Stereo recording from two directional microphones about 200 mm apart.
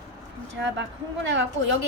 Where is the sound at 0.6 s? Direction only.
65° right (ahead or behind).